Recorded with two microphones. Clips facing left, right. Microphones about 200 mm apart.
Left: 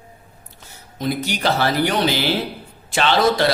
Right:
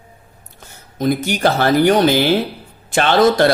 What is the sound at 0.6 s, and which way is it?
Speech, 50° right (ahead or behind).